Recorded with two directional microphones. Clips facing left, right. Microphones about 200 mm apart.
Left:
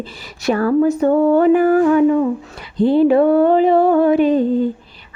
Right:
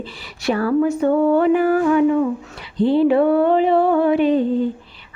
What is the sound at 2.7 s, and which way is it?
Mantra, 45° left (ahead or behind).